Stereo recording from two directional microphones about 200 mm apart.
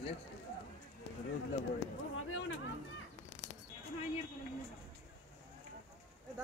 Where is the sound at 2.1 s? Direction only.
80° left.